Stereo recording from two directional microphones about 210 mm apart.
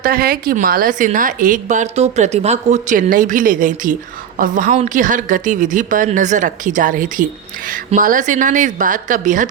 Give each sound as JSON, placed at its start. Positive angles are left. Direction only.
{"t": 0.0, "sound": "a woman's voice", "side_deg": -45}